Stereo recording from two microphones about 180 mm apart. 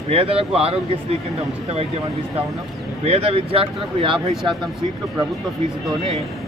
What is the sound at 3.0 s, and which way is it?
Speech, 35° right (ahead or behind).